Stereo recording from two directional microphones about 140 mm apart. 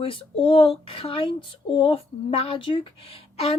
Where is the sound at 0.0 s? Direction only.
40° left (ahead or behind).